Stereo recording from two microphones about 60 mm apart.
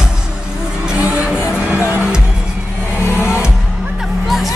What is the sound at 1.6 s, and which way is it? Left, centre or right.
Music, right.